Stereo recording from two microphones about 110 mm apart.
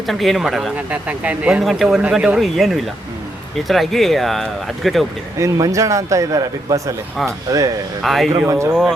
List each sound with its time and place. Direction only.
0.1 s speech: centre (ahead or behind)
0.9 s speech: 10° right (ahead or behind)
1.6 s speech: centre (ahead or behind)
5.4 s a man's voice: 30° right (ahead or behind)
8.0 s speech: centre (ahead or behind)
8.3 s a man's voice: 30° right (ahead or behind)